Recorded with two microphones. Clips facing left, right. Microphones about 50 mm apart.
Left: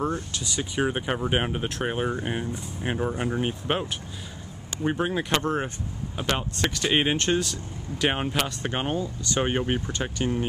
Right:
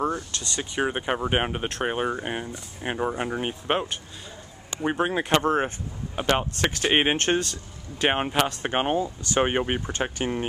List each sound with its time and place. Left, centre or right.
0.6 s speech: centre
4.8 s speech: centre
8.9 s speech: centre
9.4 s speech: right